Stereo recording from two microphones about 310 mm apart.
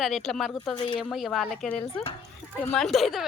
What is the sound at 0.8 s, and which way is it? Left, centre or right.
Speech, centre.